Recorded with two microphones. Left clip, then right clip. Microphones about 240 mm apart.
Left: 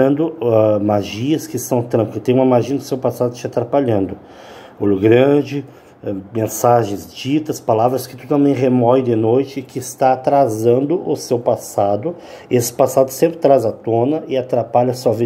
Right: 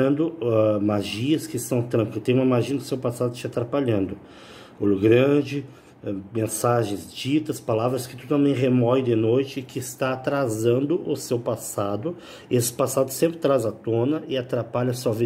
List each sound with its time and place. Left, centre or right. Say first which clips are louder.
0.0 s speech: left 7 dB; centre
13.2 s speech: left 8 dB; centre